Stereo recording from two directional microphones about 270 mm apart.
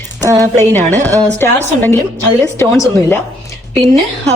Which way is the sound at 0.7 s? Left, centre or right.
Centre.